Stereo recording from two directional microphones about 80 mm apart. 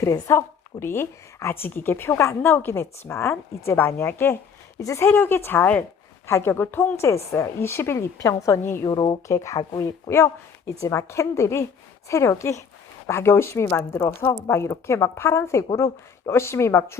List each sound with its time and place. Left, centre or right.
0.0 s a woman's voice: left
4.8 s a woman's voice: left
5.0 s speech: left
6.2 s a woman's voice: left
8.2 s a woman's voice: left
8.9 s speech: left
9.2 s a woman's voice: left